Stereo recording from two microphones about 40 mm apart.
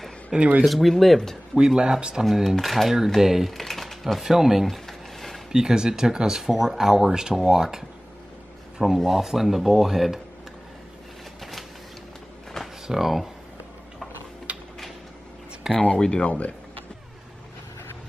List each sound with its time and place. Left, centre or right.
0.3 s speech: centre
0.7 s speech: centre
1.8 s speech: right
2.2 s speech: centre
3.5 s speech: centre
4.8 s a sound: centre
5.5 s speech: centre
8.8 s speech: centre
12.8 s speech: centre
14.5 s mechanisms: right
15.7 s speech: centre
16.0 s speech: left
16.3 s speech: left